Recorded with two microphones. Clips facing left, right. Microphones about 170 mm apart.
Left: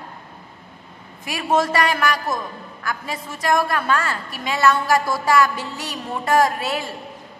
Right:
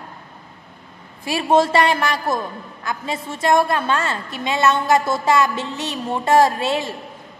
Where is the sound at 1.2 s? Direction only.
30° right (ahead or behind).